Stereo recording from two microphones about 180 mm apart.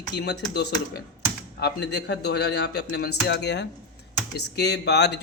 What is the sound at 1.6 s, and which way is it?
Speech, 70° left (ahead or behind).